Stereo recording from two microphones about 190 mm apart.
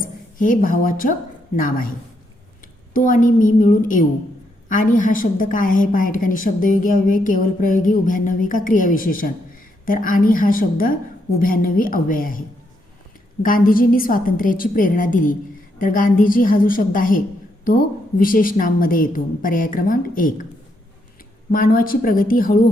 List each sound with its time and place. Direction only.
0.0 s a woman's voice: 45° left (ahead or behind)
2.9 s a woman's voice: 45° left (ahead or behind)
13.4 s a woman's voice: 50° left (ahead or behind)
21.5 s a woman's voice: 45° left (ahead or behind)